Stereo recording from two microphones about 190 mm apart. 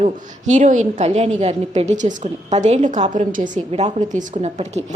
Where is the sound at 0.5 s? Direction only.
40° right (ahead or behind).